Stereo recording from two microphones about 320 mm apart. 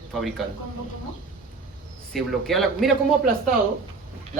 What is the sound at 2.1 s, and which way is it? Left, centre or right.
Speech, centre.